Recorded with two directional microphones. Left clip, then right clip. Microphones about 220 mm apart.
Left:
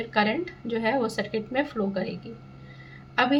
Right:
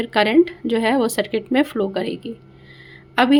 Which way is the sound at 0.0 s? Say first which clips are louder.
Right 9 dB; 55° right (ahead or behind).